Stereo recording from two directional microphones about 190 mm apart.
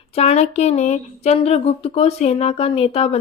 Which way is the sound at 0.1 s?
30° left (ahead or behind).